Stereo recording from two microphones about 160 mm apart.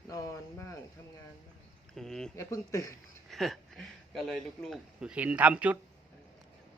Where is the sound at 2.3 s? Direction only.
20° left (ahead or behind).